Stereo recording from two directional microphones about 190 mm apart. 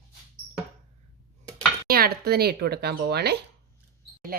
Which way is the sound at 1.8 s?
55° right (ahead or behind).